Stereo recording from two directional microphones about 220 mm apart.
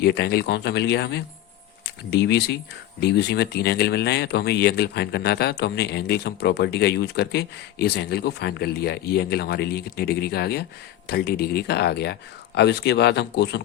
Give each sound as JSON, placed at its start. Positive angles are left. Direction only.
{"t": 0.0, "sound": "speech", "side_deg": 50}